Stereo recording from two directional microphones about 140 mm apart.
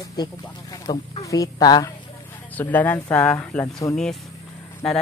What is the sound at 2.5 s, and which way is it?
Speech, 10° left (ahead or behind).